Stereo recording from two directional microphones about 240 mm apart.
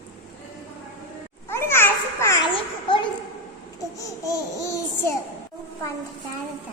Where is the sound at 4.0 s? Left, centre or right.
Centre.